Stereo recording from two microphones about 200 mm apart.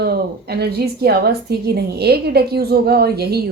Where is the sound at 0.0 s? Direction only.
55° right (ahead or behind).